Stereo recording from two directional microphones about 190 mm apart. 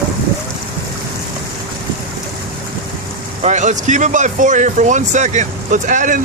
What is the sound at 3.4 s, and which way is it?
Speech, 40° right (ahead or behind).